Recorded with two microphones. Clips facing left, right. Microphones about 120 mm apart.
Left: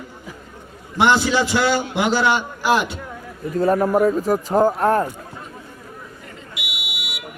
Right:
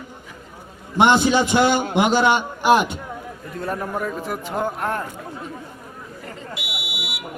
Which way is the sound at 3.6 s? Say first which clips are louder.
Left 10 dB; 40° left (ahead or behind).